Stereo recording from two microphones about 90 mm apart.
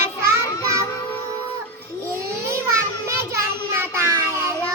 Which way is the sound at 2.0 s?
30° right (ahead or behind).